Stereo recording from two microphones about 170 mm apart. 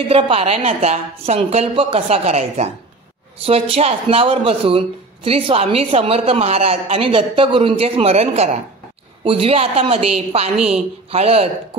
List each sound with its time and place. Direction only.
0.1 s speech: 35° right (ahead or behind)